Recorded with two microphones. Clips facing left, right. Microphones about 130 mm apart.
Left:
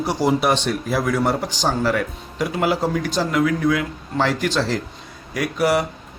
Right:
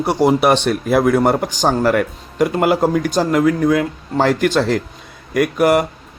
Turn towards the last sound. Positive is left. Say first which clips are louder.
# right 5 dB
turn(degrees=-50)  # may be behind; listen again after turning